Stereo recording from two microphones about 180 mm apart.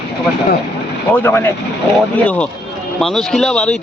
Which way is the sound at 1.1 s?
10° left (ahead or behind).